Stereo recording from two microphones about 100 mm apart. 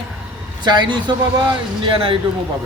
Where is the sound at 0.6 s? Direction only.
50° right (ahead or behind).